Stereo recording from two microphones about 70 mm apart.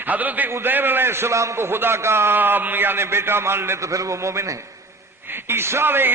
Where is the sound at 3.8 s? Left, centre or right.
Right.